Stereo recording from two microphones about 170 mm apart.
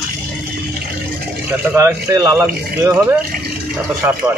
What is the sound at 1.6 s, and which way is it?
Speech, 15° right (ahead or behind).